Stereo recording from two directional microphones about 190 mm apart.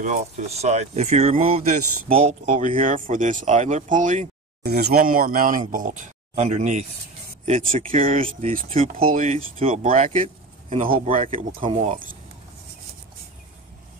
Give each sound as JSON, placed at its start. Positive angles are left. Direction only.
{"t": 0.0, "sound": "speech", "side_deg": -40}
{"t": 4.6, "sound": "speech", "side_deg": -55}
{"t": 11.2, "sound": "speech", "side_deg": -30}